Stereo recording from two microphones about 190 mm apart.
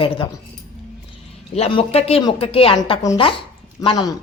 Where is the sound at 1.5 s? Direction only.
30° left (ahead or behind).